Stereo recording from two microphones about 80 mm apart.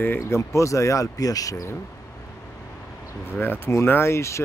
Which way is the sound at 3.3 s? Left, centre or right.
Left.